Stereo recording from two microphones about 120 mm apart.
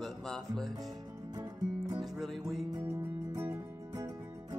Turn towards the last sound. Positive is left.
turn(degrees=-20)  # may be behind; listen again after turning